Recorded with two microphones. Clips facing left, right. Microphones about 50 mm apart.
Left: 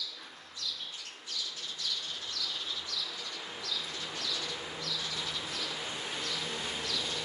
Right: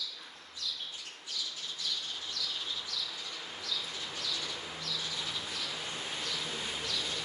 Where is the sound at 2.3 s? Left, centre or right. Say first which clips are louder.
Even; centre.